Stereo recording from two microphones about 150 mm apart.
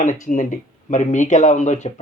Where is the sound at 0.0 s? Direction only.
55° left (ahead or behind).